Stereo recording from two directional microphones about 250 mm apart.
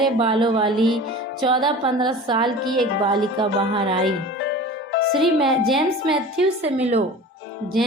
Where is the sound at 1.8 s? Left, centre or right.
Centre.